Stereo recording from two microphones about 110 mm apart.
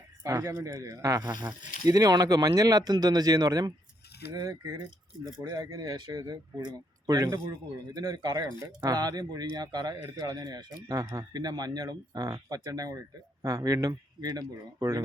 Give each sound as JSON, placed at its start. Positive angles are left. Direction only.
{"t": 0.2, "sound": "speech", "side_deg": -25}